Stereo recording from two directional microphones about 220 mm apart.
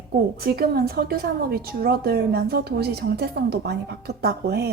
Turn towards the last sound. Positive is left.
turn(degrees=-45)  # may be behind; listen again after turning